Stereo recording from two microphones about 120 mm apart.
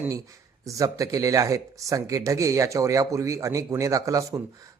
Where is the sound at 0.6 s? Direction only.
25° right (ahead or behind).